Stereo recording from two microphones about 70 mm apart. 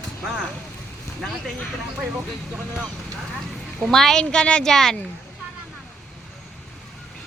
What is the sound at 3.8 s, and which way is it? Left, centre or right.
Speech, centre.